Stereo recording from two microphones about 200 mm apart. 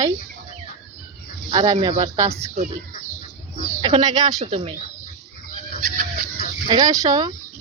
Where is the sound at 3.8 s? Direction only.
20° right (ahead or behind).